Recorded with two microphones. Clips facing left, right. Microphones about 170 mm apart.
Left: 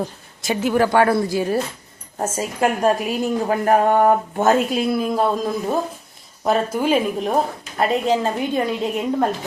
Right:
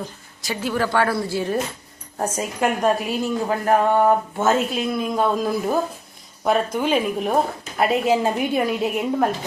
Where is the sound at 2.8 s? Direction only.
10° left (ahead or behind).